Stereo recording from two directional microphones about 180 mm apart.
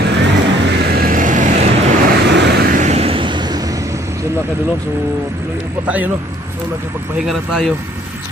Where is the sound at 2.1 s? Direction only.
70° right (ahead or behind).